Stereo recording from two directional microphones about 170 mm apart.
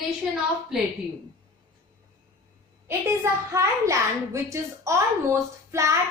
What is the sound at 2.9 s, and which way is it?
A woman's voice, 15° right (ahead or behind).